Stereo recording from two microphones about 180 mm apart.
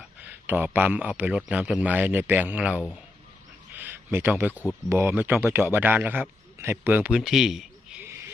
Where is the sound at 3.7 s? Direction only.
10° right (ahead or behind).